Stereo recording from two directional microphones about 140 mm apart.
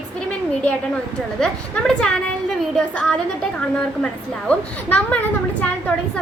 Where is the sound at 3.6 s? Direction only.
10° left (ahead or behind).